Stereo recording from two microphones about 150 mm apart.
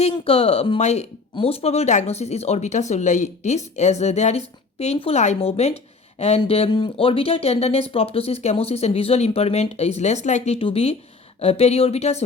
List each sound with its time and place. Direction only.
0.3 s speech: 40° left (ahead or behind)